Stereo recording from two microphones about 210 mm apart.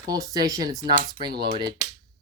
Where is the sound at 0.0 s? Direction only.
15° right (ahead or behind).